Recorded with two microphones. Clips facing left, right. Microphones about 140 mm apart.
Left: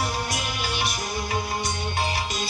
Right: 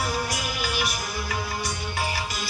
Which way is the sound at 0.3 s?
25° left (ahead or behind).